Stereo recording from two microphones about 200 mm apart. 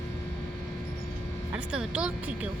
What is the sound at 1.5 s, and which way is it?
Speech, 5° right (ahead or behind).